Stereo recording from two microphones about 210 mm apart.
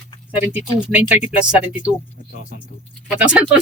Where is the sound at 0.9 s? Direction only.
5° right (ahead or behind).